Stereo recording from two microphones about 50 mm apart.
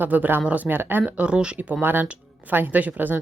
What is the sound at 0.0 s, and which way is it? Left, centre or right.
Speech, right.